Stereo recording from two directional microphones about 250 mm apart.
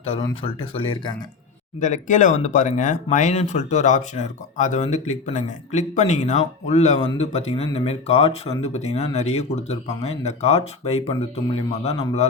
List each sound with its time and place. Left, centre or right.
0.0 s speech: left